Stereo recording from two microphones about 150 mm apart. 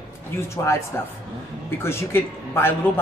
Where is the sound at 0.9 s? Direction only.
15° left (ahead or behind).